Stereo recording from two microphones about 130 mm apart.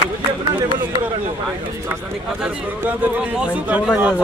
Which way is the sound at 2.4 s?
10° right (ahead or behind).